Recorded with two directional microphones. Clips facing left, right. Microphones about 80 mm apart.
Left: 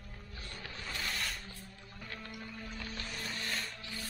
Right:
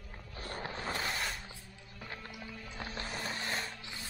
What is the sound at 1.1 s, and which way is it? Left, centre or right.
Music, centre.